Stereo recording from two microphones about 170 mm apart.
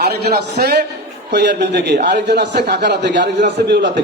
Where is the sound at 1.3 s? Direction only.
90° right.